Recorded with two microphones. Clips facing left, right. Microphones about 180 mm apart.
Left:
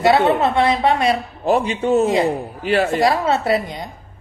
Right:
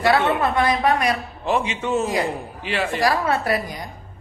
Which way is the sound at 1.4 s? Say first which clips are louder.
Left 5 dB; 35° left (ahead or behind).